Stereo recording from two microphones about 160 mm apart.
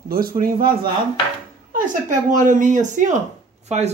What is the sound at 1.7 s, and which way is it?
Speech, 55° right (ahead or behind).